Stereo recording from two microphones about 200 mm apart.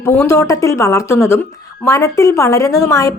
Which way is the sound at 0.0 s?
10° left (ahead or behind).